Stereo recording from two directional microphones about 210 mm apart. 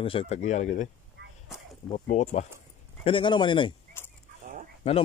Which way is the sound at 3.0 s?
25° left (ahead or behind).